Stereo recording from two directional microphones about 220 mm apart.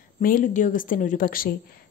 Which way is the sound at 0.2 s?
35° left (ahead or behind).